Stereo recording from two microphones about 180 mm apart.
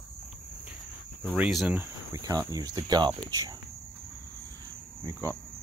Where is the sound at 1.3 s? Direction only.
5° right (ahead or behind); by 3.5 s 20° right (ahead or behind).